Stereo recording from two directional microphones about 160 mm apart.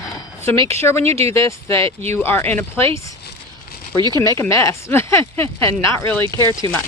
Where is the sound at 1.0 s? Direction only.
40° right (ahead or behind).